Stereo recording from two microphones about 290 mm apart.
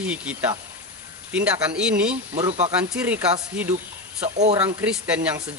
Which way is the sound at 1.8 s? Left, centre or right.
Centre.